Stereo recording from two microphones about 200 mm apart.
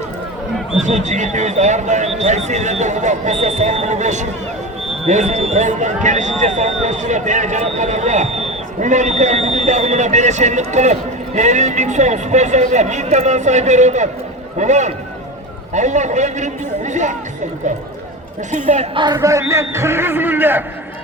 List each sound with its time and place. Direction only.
0.8 s speech: 35° right (ahead or behind)
18.5 s speech: 35° right (ahead or behind)
19.1 s a man's voice: 15° right (ahead or behind)